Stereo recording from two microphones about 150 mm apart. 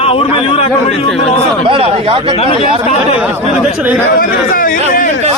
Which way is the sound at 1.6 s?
35° right (ahead or behind).